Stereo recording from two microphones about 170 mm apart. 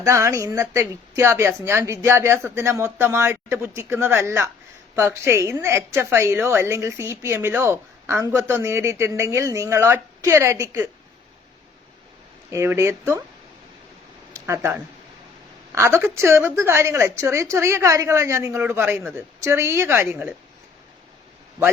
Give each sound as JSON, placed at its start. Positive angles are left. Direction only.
{"t": 0.0, "sound": "a woman's voice", "side_deg": -15}
{"t": 12.5, "sound": "a woman's voice", "side_deg": -15}
{"t": 14.3, "sound": "a woman's voice", "side_deg": -15}